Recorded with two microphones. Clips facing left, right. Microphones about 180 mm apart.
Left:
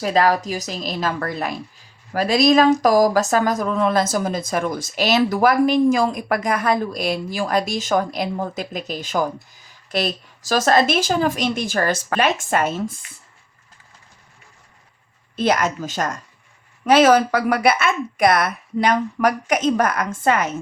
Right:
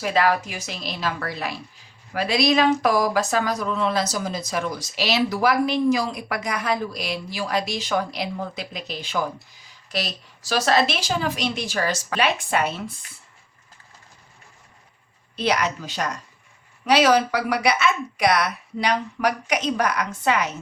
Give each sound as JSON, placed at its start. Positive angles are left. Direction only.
{"t": 0.0, "sound": "speech", "side_deg": 40}
{"t": 15.4, "sound": "speech", "side_deg": 50}